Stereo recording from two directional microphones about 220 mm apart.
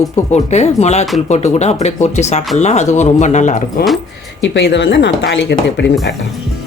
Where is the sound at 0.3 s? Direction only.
30° left (ahead or behind).